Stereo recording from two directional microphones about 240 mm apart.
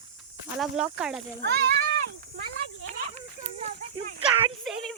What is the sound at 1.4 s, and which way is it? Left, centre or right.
Speech, right.